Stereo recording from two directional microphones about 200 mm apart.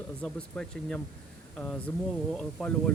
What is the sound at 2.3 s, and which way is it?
Speech, centre (ahead or behind).